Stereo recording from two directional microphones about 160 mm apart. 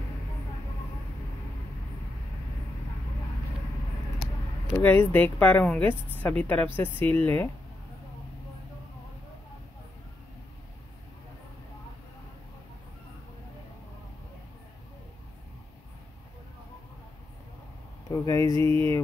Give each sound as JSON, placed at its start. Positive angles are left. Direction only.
{"t": 4.7, "sound": "speech", "side_deg": 10}
{"t": 18.1, "sound": "mantra", "side_deg": 20}